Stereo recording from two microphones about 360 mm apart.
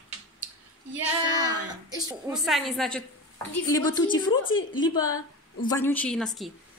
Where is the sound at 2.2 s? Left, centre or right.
Centre.